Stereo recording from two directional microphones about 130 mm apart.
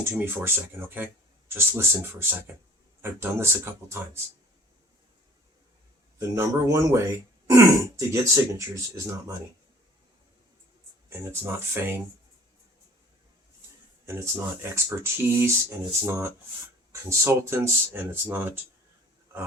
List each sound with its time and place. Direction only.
0.1 s speech: 15° right (ahead or behind)
6.1 s speech: 25° right (ahead or behind)
11.1 s speech: 20° right (ahead or behind)
14.0 s speech: 20° right (ahead or behind)